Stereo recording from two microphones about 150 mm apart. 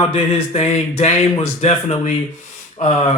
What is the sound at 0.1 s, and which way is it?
Speech, 40° left (ahead or behind).